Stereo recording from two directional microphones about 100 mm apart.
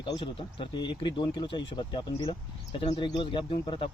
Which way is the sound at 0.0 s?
60° left (ahead or behind).